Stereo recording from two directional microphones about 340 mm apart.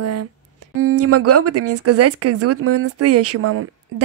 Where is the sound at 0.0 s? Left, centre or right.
Right.